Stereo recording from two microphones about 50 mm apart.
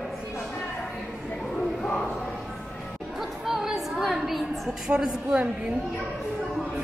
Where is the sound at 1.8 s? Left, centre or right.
Centre.